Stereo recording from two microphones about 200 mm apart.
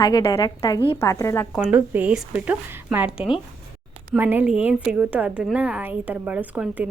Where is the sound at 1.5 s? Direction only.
5° right (ahead or behind).